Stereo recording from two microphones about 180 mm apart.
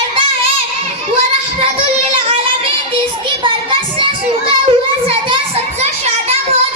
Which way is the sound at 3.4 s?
30° right (ahead or behind).